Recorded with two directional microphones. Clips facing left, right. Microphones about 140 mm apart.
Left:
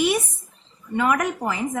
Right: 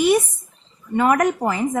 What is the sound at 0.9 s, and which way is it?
Speech, 40° right (ahead or behind).